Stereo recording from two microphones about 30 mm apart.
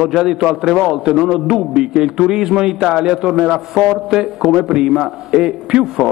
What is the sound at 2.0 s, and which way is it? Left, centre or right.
Speech, right.